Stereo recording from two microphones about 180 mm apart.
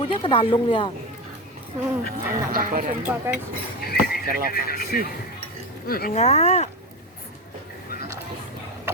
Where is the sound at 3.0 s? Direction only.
10° right (ahead or behind).